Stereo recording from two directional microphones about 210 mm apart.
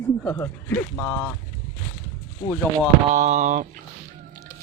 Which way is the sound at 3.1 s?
35° right (ahead or behind).